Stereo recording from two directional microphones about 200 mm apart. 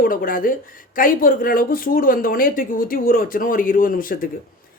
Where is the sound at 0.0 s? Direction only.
45° left (ahead or behind).